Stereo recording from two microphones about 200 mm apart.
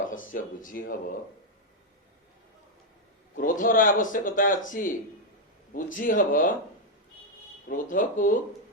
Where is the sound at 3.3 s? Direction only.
45° left (ahead or behind).